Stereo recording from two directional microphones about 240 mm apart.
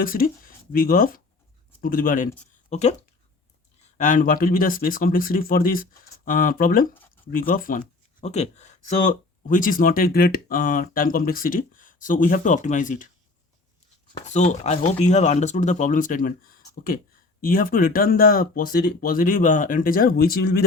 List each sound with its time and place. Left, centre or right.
0.0 s speech: left
3.9 s speech: left
14.2 s speech: left